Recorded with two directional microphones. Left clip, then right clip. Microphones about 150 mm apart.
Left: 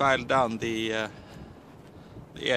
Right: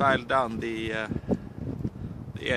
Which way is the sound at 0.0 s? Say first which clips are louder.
Even; 50° left (ahead or behind).